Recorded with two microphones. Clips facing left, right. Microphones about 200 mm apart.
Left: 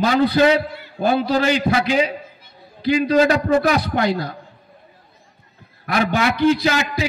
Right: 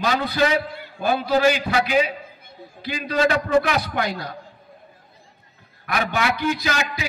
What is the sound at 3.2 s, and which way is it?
Speech, 40° left (ahead or behind).